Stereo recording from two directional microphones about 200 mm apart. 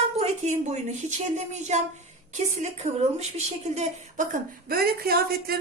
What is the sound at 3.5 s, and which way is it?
Speech, 35° right (ahead or behind).